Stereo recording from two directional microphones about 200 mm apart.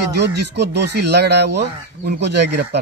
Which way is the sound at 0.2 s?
55° right (ahead or behind).